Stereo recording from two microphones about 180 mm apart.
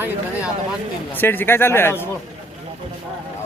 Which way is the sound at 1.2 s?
10° left (ahead or behind).